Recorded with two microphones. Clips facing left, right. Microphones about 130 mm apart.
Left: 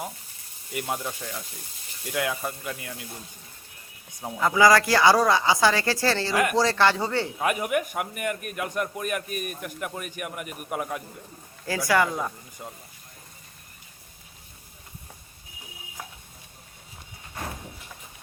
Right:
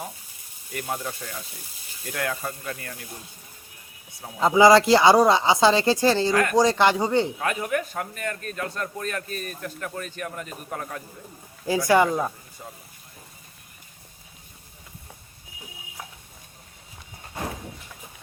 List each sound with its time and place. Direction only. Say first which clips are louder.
0.7 s a man's voice: even; 10° left (ahead or behind)
4.4 s speech: right 4 dB; 25° right (ahead or behind)
6.3 s a man's voice: right 2 dB; 15° left (ahead or behind)
6.6 s speech: right 4 dB; 15° right (ahead or behind)
7.3 s a man's voice: left 1 dB; 15° left (ahead or behind)
11.6 s speech: right 4 dB; 20° right (ahead or behind)